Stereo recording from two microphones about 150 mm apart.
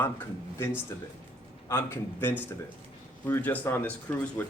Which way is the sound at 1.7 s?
15° left (ahead or behind).